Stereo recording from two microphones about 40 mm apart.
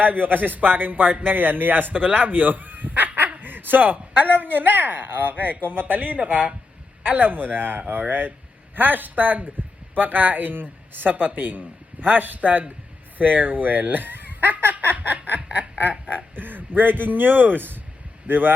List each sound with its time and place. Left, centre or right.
0.0 s a man's voice: right
1.9 s a man's voice: right
14.7 s a sound: right
15.8 s a man's voice: right